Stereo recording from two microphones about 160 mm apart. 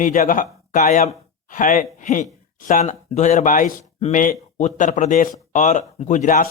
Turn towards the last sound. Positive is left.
turn(degrees=55)  # may be behind; listen again after turning